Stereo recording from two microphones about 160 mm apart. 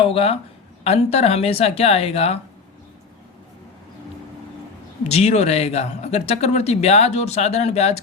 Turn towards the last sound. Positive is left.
turn(degrees=40)  # may be behind; listen again after turning